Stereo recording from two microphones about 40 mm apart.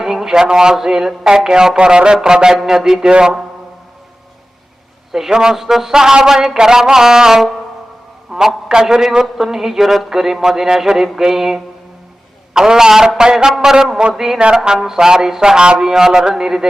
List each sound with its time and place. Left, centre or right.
0.0 s a man's voice: centre
5.1 s a man's voice: centre
15.8 s speech: centre